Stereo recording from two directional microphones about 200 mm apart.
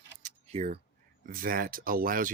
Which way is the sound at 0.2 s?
35° right (ahead or behind).